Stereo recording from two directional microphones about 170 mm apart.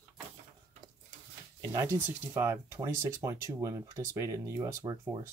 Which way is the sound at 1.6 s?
20° right (ahead or behind).